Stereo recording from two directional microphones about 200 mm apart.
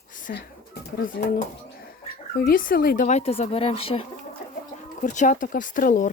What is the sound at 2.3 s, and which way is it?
Speech, 45° left (ahead or behind).